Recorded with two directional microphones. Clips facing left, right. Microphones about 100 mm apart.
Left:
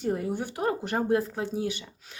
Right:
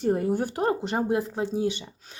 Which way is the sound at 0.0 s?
45° right (ahead or behind).